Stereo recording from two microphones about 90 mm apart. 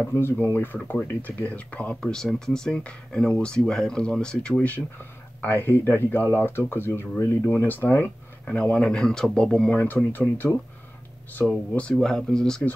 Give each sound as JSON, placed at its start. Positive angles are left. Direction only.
{"t": 0.1, "sound": "speech", "side_deg": 25}
{"t": 5.4, "sound": "speech", "side_deg": 25}
{"t": 11.4, "sound": "speech", "side_deg": 10}